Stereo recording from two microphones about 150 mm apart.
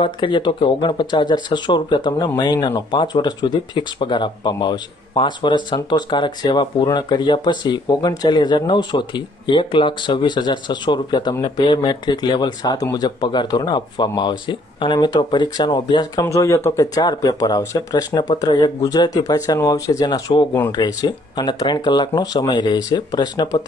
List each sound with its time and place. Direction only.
0.0 s speech: 30° left (ahead or behind)